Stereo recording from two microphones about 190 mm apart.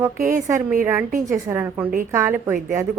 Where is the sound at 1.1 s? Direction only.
40° right (ahead or behind).